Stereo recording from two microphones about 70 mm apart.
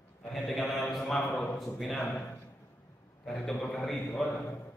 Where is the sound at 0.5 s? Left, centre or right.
Centre.